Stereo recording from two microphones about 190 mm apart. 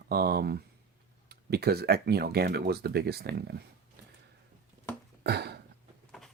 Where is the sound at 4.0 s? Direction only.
60° right (ahead or behind).